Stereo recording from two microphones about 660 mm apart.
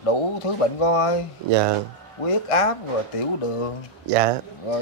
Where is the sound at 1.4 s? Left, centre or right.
Right.